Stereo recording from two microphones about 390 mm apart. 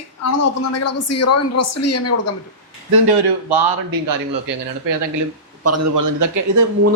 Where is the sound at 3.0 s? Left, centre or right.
Right.